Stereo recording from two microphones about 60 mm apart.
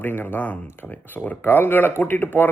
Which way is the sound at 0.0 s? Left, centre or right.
Left.